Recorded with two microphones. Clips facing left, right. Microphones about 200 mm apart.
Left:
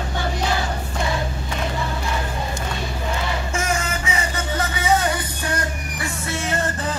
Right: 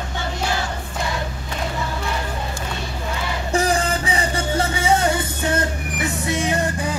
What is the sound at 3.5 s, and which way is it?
Music, 35° right (ahead or behind).